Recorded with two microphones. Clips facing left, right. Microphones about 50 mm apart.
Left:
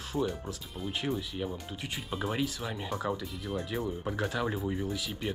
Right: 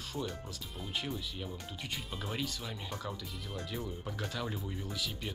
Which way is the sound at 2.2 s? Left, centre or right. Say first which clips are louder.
Left 8 dB; left.